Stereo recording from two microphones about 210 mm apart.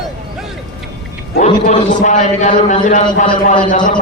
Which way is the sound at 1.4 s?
35° left (ahead or behind).